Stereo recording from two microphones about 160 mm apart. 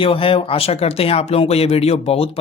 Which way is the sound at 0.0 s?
35° left (ahead or behind).